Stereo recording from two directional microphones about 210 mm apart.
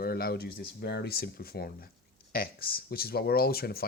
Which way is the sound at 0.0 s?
50° left (ahead or behind).